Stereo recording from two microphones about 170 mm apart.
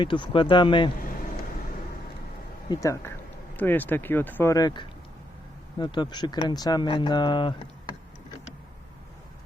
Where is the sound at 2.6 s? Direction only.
20° left (ahead or behind).